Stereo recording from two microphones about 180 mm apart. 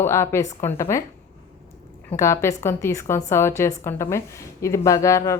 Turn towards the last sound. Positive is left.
turn(degrees=15)  # may be behind; listen again after turning